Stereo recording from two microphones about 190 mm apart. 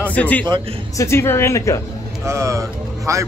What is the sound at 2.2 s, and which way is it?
Speech, 15° right (ahead or behind).